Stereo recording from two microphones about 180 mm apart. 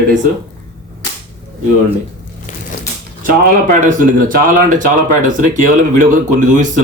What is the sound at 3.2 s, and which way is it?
Speech, 50° right (ahead or behind).